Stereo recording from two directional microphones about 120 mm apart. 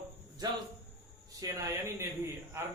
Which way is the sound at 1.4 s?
25° right (ahead or behind).